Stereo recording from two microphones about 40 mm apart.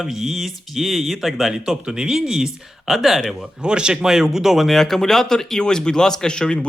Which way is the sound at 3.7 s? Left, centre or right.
Right.